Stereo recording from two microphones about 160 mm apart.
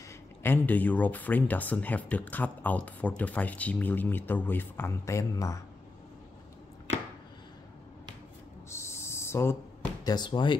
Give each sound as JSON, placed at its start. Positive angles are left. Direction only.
{"t": 0.4, "sound": "speech", "side_deg": 15}
{"t": 8.6, "sound": "a sound", "side_deg": 15}
{"t": 10.1, "sound": "speech", "side_deg": 30}